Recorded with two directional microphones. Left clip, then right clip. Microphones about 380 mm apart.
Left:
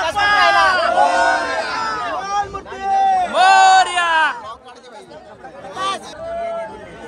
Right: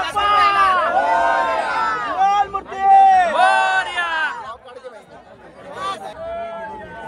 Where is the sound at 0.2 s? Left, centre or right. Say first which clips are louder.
Left 1 dB; centre.